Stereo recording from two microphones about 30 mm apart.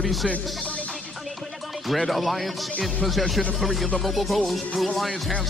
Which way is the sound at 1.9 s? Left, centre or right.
Centre.